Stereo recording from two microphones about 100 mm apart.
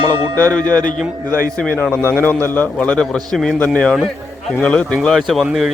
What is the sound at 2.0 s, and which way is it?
Speech, 20° right (ahead or behind).